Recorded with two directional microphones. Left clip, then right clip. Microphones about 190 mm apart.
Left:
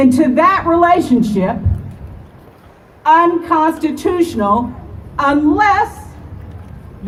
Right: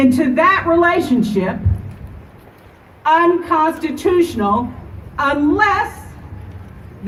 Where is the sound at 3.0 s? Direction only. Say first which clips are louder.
Left 3 dB; 50° left (ahead or behind).